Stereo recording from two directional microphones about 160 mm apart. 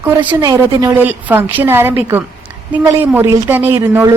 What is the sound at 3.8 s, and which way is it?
Speech, 20° right (ahead or behind).